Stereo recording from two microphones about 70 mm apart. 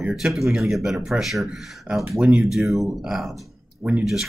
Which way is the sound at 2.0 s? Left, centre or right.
Centre.